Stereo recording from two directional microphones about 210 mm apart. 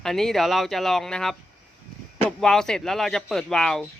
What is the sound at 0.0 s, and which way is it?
Speech, centre (ahead or behind).